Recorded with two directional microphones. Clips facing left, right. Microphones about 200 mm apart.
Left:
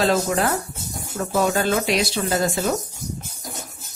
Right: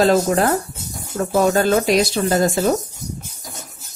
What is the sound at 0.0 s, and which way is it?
Speech, 40° right (ahead or behind).